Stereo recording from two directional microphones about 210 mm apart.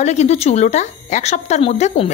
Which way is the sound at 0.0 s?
30° left (ahead or behind).